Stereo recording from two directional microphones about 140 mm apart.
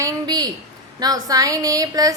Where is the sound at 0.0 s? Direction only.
25° right (ahead or behind).